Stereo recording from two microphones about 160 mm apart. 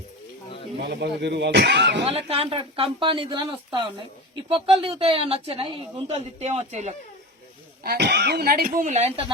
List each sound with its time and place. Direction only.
0.8 s speech: 90° right
2.0 s speech: 40° right (ahead or behind)
7.9 s speech: 90° right; by 9.2 s 45° right (ahead or behind)